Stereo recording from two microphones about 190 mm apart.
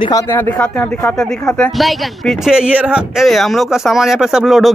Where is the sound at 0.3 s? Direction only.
10° left (ahead or behind).